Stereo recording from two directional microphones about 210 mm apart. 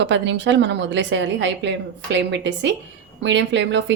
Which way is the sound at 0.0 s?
60° right (ahead or behind).